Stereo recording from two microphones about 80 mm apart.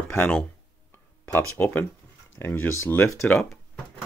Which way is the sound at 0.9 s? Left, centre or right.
Left.